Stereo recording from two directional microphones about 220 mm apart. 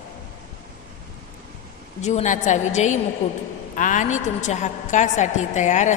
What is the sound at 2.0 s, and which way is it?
A woman's voice, 30° left (ahead or behind).